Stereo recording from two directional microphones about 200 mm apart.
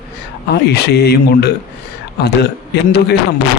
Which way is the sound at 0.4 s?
55° left (ahead or behind).